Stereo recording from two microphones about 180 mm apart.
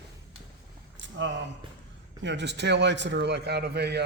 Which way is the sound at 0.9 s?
90° right.